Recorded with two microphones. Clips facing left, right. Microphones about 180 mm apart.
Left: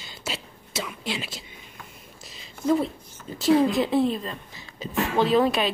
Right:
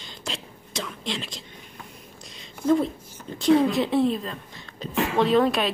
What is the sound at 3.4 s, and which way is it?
Speech, centre (ahead or behind).